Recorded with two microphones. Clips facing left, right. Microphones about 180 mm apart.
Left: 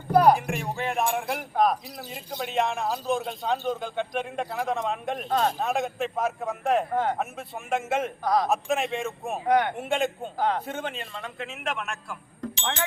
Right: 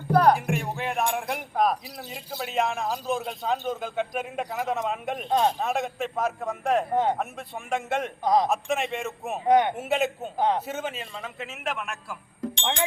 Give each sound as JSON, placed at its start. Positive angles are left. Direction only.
{"t": 0.1, "sound": "music", "side_deg": 10}
{"t": 0.3, "sound": "speech", "side_deg": 0}
{"t": 6.9, "sound": "speech", "side_deg": -20}
{"t": 7.2, "sound": "speech", "side_deg": 0}
{"t": 8.2, "sound": "speech", "side_deg": -20}
{"t": 8.4, "sound": "speech", "side_deg": 0}
{"t": 9.5, "sound": "speech", "side_deg": -20}
{"t": 9.7, "sound": "speech", "side_deg": -5}
{"t": 10.3, "sound": "speech", "side_deg": -20}
{"t": 10.7, "sound": "speech", "side_deg": -5}